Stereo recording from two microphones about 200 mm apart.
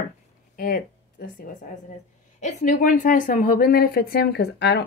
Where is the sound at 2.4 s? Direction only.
40° left (ahead or behind).